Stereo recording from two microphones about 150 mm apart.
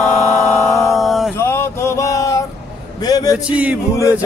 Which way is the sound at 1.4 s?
20° left (ahead or behind).